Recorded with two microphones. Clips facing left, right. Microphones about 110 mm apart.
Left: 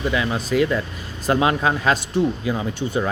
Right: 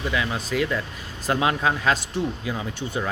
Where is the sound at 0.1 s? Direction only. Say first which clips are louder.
Left 3 dB; 35° left (ahead or behind).